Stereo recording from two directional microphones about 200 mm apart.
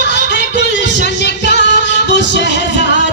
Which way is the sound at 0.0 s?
60° left (ahead or behind).